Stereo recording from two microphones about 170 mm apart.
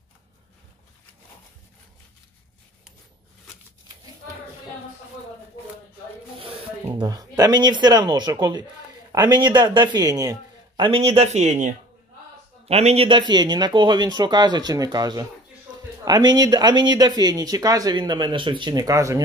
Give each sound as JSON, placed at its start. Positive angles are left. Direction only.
{"t": 6.9, "sound": "speech", "side_deg": -20}
{"t": 10.8, "sound": "speech", "side_deg": -35}
{"t": 16.3, "sound": "speech", "side_deg": -25}